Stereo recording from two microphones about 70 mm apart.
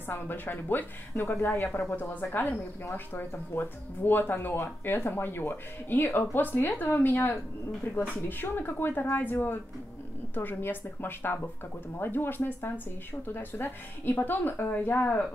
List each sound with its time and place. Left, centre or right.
0.1 s speech: left